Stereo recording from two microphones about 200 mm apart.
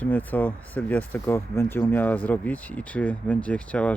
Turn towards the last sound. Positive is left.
turn(degrees=5)  # may be behind; listen again after turning